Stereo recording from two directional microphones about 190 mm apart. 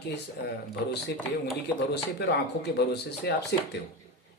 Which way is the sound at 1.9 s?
60° left (ahead or behind).